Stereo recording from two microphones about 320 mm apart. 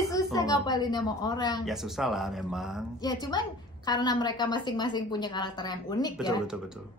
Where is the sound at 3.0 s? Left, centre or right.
Centre.